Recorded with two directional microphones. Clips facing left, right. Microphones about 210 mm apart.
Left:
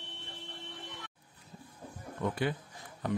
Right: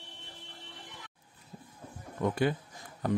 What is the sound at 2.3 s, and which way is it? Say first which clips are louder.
Speech: right 4 dB; 45° right (ahead or behind).